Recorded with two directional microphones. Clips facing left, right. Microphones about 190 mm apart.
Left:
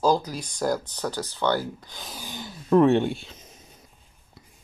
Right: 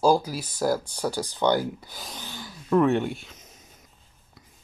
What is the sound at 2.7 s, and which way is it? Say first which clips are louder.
Speech: left 3 dB; 30° left (ahead or behind).